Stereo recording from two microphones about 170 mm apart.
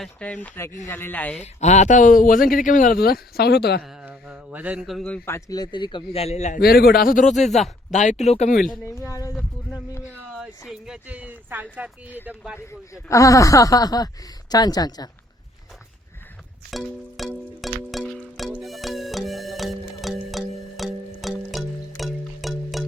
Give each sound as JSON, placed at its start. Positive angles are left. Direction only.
{"t": 0.0, "sound": "a man's voice", "side_deg": 5}
{"t": 1.4, "sound": "speech", "side_deg": 40}
{"t": 4.0, "sound": "a man's voice", "side_deg": -10}
{"t": 6.6, "sound": "a man's voice", "side_deg": 65}
{"t": 8.7, "sound": "speech", "side_deg": 20}
{"t": 9.3, "sound": "a sound", "side_deg": 5}
{"t": 10.7, "sound": "speech", "side_deg": -5}
{"t": 12.5, "sound": "speech", "side_deg": 20}
{"t": 16.7, "sound": "music", "side_deg": 0}